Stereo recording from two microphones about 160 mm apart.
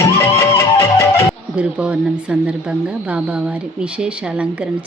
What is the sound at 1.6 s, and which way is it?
Speech, 5° right (ahead or behind).